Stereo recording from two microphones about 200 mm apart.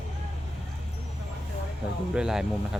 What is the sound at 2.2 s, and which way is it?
Speech, 5° right (ahead or behind).